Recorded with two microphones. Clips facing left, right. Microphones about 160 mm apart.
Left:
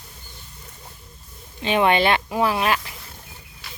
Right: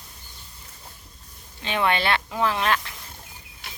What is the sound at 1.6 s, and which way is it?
Speech, 15° left (ahead or behind).